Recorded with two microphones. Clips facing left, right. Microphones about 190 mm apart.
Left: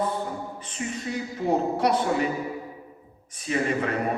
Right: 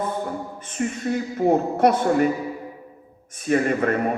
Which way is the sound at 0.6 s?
50° right (ahead or behind).